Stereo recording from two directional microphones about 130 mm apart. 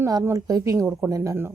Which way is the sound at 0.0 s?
20° right (ahead or behind).